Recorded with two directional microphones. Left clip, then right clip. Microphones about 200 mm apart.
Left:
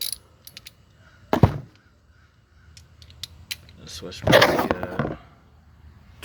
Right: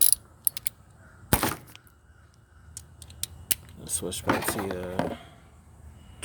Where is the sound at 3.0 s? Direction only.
50° right (ahead or behind).